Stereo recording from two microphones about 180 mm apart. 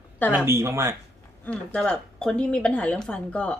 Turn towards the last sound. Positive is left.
turn(degrees=5)  # may be behind; listen again after turning